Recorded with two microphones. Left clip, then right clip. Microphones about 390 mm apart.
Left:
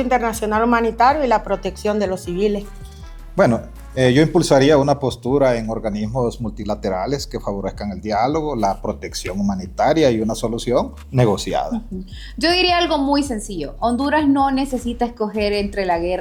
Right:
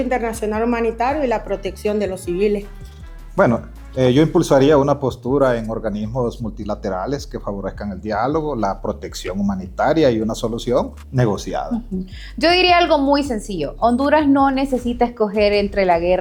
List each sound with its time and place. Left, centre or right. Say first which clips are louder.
0.0 s a woman's voice: left 2 dB; left
3.3 s speech: even; centre
12.4 s a woman's voice: right 3 dB; right